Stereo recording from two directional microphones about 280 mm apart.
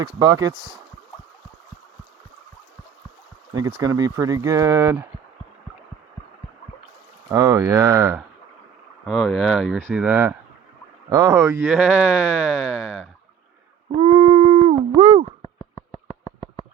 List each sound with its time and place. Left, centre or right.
0.2 s speech: centre
3.5 s speech: centre
7.3 s speech: centre
13.9 s a sound: centre